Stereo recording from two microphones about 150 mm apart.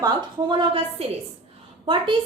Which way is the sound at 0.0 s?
30° right (ahead or behind).